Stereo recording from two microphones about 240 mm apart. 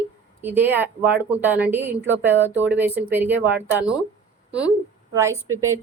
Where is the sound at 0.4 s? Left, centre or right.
Centre.